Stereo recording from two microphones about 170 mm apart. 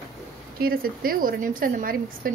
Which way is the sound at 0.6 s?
60° right (ahead or behind).